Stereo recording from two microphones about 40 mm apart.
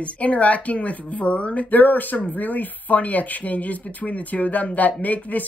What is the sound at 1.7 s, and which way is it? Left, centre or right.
Speech, left.